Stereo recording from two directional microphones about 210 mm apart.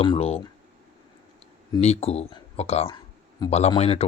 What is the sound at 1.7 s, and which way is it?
Speech, 30° left (ahead or behind).